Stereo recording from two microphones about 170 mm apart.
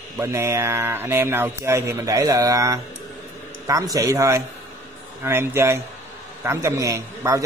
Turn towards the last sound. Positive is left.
turn(degrees=-20)  # may be behind; listen again after turning